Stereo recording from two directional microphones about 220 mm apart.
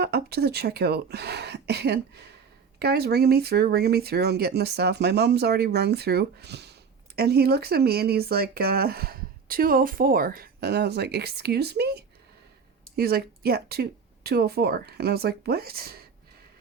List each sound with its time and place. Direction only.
0.0 s speech: 45° right (ahead or behind)